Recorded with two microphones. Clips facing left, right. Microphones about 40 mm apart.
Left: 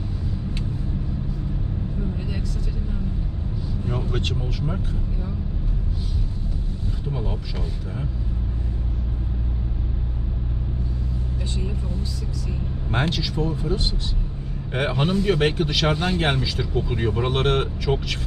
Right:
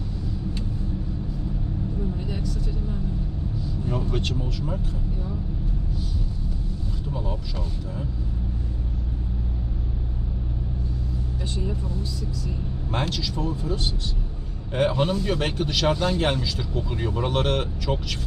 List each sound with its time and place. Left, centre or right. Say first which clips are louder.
3.8 s vehicle: even; left
7.1 s speech: left 1 dB; centre
12.9 s speech: left 3 dB; left